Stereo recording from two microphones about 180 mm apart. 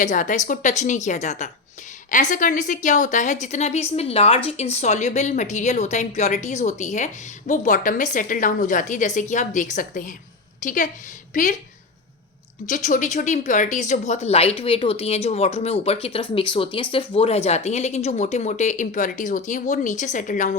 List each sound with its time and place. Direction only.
0.0 s a woman's voice: 45° left (ahead or behind)
12.6 s a woman's voice: 45° left (ahead or behind)